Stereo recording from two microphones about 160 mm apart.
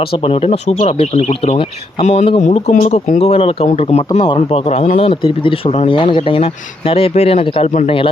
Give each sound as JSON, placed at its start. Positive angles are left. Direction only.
{"t": 0.2, "sound": "speech", "side_deg": 35}